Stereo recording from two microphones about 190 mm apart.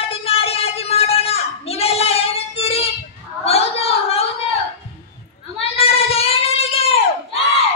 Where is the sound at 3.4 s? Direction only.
30° left (ahead or behind).